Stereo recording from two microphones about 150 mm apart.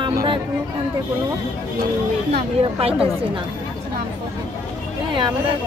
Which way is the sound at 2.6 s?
40° right (ahead or behind).